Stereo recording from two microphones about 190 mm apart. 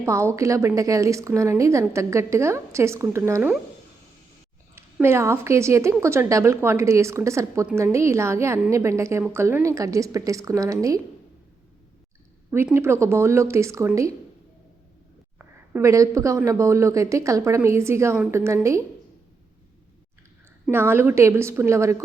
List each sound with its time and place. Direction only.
0.0 s a woman's voice: 15° right (ahead or behind)
4.7 s a woman's voice: 15° right (ahead or behind)
12.5 s a woman's voice: 10° right (ahead or behind)
15.4 s a woman's voice: 10° right (ahead or behind)
20.7 s a woman's voice: 10° right (ahead or behind)